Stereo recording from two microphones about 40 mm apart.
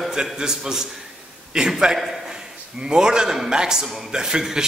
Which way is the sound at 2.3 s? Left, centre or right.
Centre.